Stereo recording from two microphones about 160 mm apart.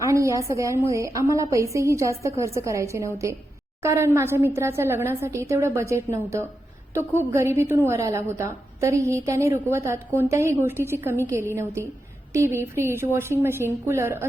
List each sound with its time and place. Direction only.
0.0 s a woman's voice: 20° right (ahead or behind)